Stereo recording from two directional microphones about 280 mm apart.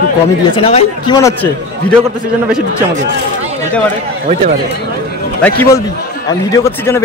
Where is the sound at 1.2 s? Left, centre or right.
Centre.